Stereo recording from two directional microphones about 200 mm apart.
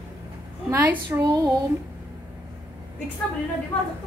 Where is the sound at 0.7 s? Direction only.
10° right (ahead or behind).